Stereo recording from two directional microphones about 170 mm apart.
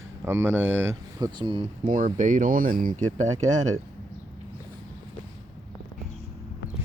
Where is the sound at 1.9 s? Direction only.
50° right (ahead or behind).